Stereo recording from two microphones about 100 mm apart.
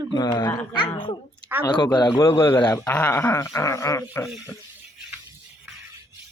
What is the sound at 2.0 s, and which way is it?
Speech, 35° left (ahead or behind).